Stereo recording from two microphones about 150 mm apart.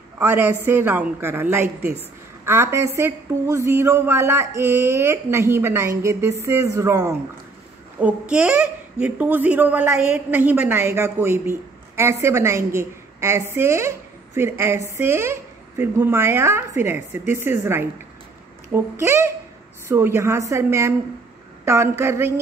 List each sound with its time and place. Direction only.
0.2 s a woman's voice: 15° right (ahead or behind)
8.0 s a woman's voice: 10° right (ahead or behind)